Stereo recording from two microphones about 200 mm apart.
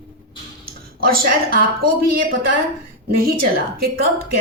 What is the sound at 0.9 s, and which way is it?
Speech, 45° right (ahead or behind).